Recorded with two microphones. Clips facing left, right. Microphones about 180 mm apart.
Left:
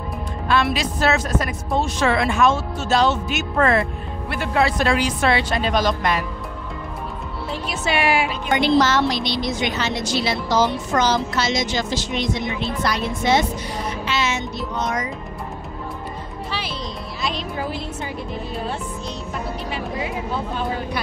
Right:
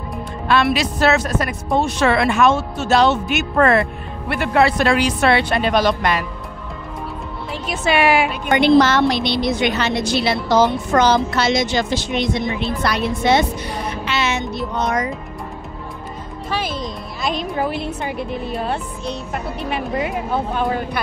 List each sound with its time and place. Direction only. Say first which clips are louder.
0.5 s speech: right 3 dB; 70° right (ahead or behind)
7.7 s speech: right 5 dB; 55° right (ahead or behind)
14.0 s music: right 3 dB; 65° right (ahead or behind)
16.4 s music: right 7 dB; 50° right (ahead or behind)
17.2 s speech: right 5 dB; 50° right (ahead or behind)